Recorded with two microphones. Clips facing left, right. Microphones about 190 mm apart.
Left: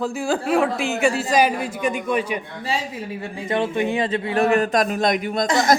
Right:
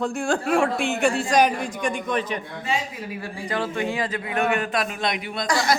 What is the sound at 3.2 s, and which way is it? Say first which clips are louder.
A man's voice: left 5 dB; 20° left (ahead or behind).